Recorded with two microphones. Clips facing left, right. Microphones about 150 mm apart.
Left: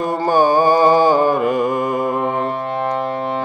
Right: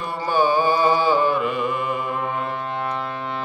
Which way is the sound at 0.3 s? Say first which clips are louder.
Left 5 dB; 45° left (ahead or behind).